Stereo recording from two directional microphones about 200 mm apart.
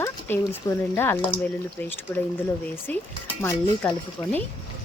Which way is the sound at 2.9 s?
10° left (ahead or behind).